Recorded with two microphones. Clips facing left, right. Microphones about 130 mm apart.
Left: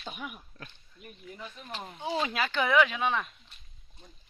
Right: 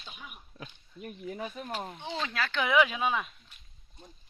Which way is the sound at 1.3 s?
75° right (ahead or behind).